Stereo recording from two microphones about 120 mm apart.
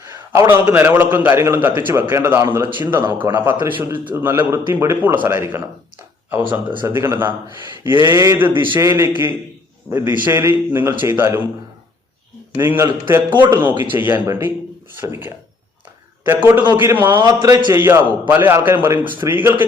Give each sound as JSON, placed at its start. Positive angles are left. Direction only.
{"t": 0.0, "sound": "a man's voice", "side_deg": -20}
{"t": 6.8, "sound": "a man's voice", "side_deg": -20}
{"t": 12.5, "sound": "a man's voice", "side_deg": -20}
{"t": 17.4, "sound": "a man's voice", "side_deg": -35}
{"t": 17.7, "sound": "a man's voice", "side_deg": -20}